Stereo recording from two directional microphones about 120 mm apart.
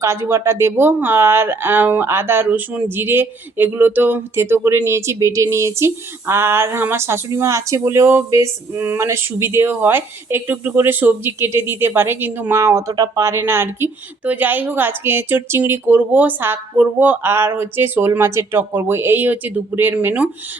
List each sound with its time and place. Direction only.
0.0 s a woman's voice: 25° right (ahead or behind)